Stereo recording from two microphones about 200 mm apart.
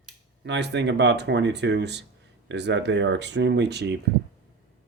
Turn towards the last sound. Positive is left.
turn(degrees=-55)  # may be behind; listen again after turning